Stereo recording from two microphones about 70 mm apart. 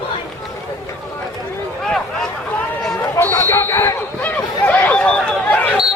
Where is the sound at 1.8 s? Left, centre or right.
Centre.